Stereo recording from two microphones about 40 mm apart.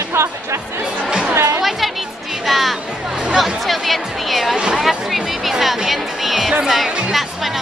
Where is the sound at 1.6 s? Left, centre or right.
Centre.